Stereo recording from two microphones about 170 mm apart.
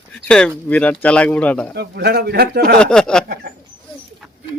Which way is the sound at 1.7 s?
75° right (ahead or behind).